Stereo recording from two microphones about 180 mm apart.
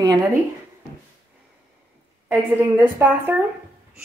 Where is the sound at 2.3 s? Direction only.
10° right (ahead or behind).